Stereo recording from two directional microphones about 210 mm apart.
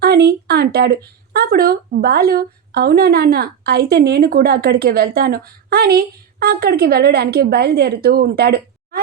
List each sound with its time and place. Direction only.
0.0 s speech: 50° right (ahead or behind)